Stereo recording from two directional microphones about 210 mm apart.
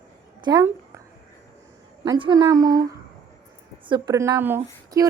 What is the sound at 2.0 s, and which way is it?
A child's voice, 20° right (ahead or behind).